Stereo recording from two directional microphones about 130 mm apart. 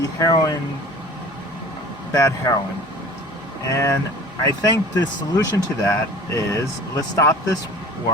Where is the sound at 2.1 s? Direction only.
25° left (ahead or behind).